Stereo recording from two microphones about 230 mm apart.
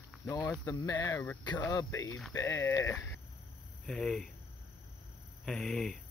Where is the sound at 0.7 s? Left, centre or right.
Centre.